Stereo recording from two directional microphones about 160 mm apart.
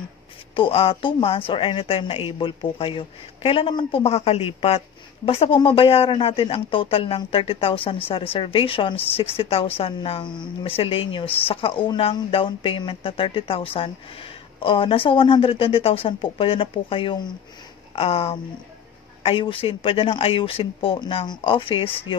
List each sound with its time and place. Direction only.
0.6 s speech: 35° left (ahead or behind)